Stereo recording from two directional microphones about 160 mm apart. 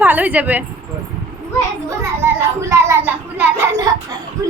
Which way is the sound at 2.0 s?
15° right (ahead or behind).